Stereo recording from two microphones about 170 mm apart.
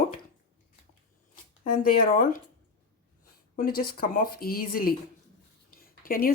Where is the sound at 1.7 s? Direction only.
60° left (ahead or behind).